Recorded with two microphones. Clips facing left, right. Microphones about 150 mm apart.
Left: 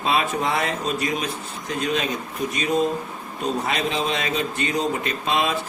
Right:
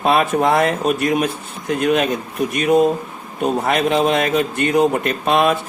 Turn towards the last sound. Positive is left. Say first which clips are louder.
# right 7 dB
turn(degrees=-55)  # may be behind; listen again after turning